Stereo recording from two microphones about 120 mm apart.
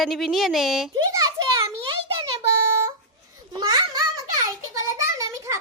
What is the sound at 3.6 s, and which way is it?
Children playing, 35° right (ahead or behind).